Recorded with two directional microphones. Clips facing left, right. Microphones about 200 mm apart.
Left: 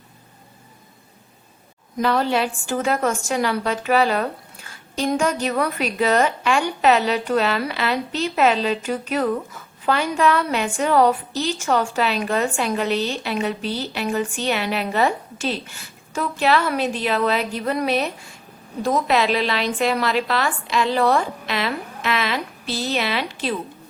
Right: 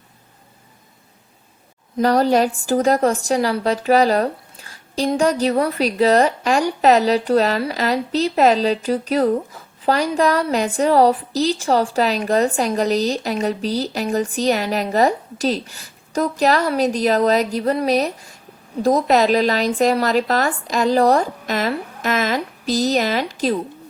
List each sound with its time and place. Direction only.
2.0 s a woman's voice: 40° right (ahead or behind)